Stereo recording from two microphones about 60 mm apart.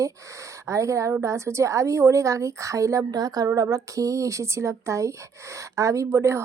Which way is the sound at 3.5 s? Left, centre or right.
Right.